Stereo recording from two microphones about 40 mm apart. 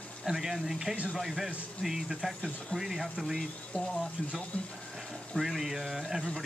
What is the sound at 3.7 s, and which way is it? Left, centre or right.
Speech, left.